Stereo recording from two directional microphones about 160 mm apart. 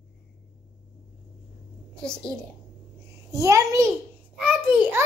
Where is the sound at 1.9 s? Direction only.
5° left (ahead or behind).